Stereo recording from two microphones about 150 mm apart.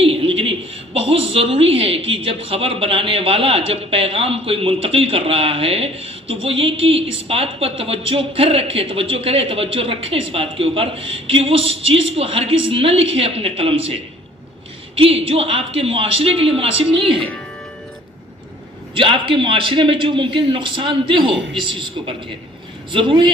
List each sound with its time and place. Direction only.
0.0 s a sound: 40° right (ahead or behind)
0.9 s a woman's voice: 40° right (ahead or behind)
18.9 s a woman's voice: 35° right (ahead or behind)